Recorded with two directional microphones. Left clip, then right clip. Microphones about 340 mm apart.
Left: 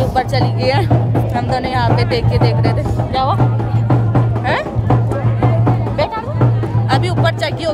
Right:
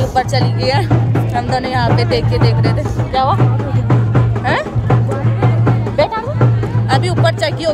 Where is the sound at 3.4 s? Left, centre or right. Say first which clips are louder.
Right 1 dB; left.